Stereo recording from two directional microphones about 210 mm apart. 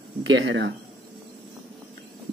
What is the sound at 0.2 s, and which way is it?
Speech, 65° right (ahead or behind).